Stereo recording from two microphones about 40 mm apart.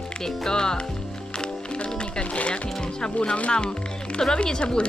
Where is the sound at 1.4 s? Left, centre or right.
Left.